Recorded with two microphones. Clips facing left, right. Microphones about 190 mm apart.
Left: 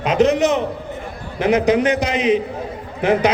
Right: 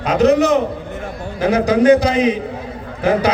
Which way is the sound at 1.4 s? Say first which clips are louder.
Right 1 dB; 35° right (ahead or behind).